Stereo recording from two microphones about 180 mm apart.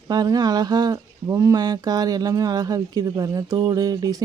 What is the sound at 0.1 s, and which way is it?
Speech, 20° right (ahead or behind).